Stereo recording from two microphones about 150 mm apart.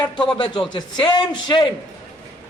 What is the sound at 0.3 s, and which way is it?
A woman's voice, 30° left (ahead or behind).